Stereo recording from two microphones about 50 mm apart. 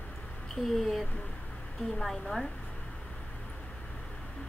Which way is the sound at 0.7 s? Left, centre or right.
Centre.